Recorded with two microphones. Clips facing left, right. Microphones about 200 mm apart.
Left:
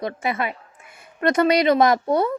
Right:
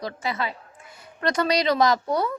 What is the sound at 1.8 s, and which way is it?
Speech, 25° left (ahead or behind).